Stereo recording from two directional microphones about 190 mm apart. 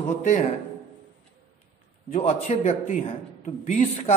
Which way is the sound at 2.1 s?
35° left (ahead or behind).